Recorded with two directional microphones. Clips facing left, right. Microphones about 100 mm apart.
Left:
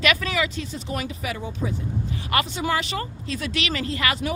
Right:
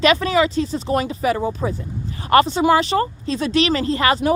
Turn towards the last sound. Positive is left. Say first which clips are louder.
# right 8 dB
turn(degrees=-35)  # may be behind; listen again after turning